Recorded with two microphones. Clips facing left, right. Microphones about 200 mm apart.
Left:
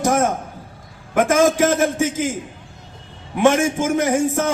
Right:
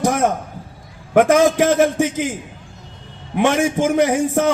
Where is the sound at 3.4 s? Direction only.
45° left (ahead or behind).